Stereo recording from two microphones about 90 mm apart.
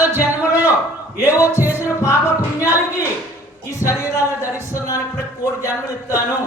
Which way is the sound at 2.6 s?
35° left (ahead or behind).